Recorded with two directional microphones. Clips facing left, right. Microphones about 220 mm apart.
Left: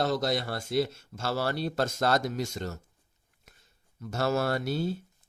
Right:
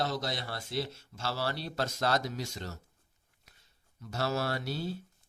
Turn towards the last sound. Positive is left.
turn(degrees=50)  # may be behind; listen again after turning